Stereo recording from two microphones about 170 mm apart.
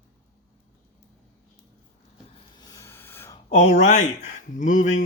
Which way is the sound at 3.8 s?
45° left (ahead or behind).